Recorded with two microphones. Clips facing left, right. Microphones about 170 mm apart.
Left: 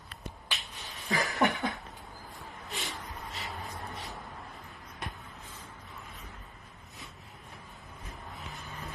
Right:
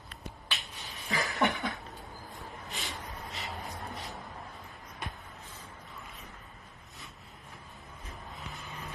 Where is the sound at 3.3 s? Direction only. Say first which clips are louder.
Even; 20° right (ahead or behind).